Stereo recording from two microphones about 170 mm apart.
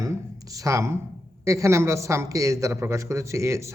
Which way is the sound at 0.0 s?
20° right (ahead or behind).